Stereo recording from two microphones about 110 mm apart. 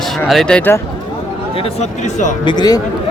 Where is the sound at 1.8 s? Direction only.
90° left.